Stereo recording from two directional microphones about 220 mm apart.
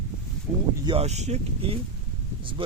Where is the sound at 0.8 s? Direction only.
25° right (ahead or behind).